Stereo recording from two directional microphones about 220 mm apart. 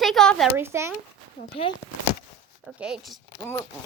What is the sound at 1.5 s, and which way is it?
Speech, 25° left (ahead or behind).